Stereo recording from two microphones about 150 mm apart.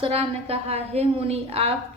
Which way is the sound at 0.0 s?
40° right (ahead or behind).